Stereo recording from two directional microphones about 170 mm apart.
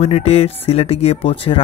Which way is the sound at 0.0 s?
35° left (ahead or behind).